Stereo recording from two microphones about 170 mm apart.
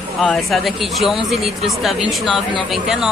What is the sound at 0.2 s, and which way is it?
Speech, centre (ahead or behind).